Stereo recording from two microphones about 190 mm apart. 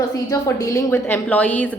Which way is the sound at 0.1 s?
15° left (ahead or behind).